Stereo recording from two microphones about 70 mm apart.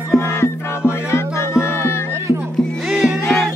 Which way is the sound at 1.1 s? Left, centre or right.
Left.